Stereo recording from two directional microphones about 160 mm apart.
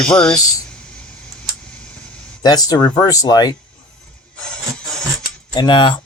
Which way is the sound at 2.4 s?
25° left (ahead or behind).